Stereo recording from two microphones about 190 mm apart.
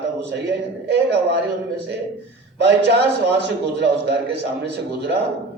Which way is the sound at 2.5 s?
60° right (ahead or behind).